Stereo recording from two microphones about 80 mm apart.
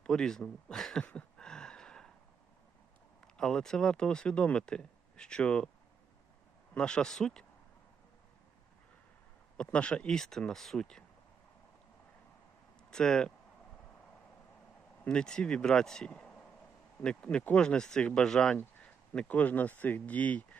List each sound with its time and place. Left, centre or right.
0.0 s speech: centre
1.0 s a sound: centre
3.2 s speech: centre
6.7 s speech: centre
9.6 s speech: centre
12.9 s speech: centre
15.0 s speech: centre